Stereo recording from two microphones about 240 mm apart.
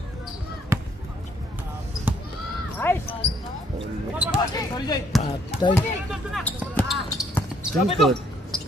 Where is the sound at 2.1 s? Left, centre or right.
Centre.